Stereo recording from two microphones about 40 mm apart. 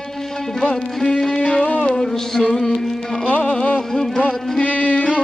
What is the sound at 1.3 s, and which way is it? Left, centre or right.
Music, left.